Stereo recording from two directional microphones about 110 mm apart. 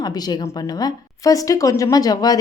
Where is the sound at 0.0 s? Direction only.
35° left (ahead or behind).